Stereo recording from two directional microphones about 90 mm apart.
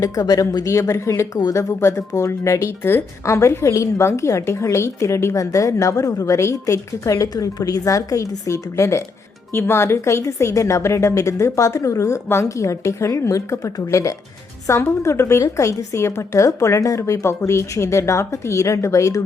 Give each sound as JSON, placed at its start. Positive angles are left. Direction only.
{"t": 0.0, "sound": "speech", "side_deg": 40}